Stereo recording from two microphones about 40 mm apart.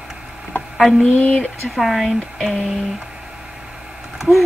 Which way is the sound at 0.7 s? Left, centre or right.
Centre.